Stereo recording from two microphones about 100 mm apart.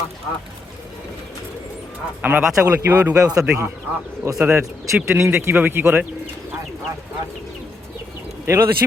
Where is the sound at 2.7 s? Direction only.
20° right (ahead or behind).